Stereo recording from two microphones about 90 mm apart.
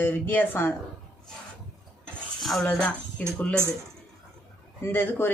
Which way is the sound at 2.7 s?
10° left (ahead or behind).